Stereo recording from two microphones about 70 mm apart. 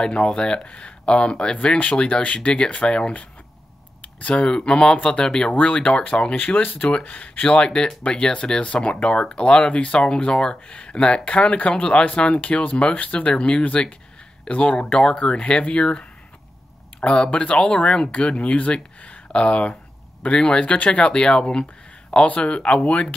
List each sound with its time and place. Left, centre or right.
0.0 s speech: centre
6.3 s speech: left